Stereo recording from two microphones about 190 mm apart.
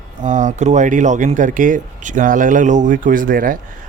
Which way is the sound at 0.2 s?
40° right (ahead or behind).